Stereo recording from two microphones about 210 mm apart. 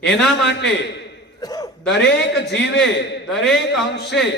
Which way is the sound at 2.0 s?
55° left (ahead or behind).